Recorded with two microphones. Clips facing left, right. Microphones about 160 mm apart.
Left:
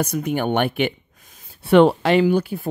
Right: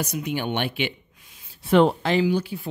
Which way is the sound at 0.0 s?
50° left (ahead or behind).